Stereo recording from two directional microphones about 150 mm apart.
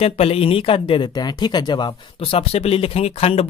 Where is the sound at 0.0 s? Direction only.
40° left (ahead or behind).